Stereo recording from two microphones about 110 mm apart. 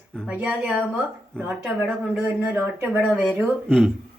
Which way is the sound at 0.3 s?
15° right (ahead or behind).